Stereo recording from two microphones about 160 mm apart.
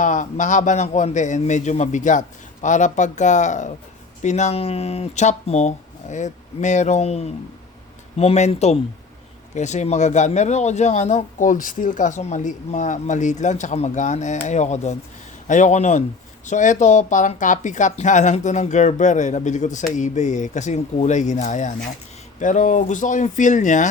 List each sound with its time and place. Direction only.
0.0 s speech: 50° left (ahead or behind)